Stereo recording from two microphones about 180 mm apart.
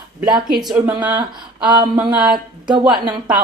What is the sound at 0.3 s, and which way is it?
Speech, 25° right (ahead or behind).